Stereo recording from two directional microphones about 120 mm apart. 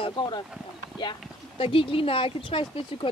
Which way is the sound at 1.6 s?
50° left (ahead or behind).